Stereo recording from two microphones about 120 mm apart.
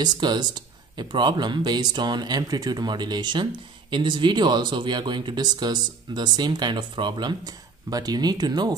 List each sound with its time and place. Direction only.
0.0 s speech: 35° right (ahead or behind)